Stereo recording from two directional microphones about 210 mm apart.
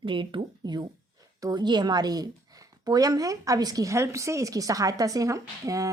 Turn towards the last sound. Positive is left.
turn(degrees=-15)  # may be behind; listen again after turning